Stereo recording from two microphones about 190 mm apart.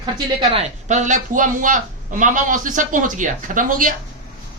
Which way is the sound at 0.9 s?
40° right (ahead or behind).